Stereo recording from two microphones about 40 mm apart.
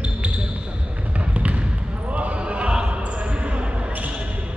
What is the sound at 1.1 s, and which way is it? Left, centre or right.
Trickle, right.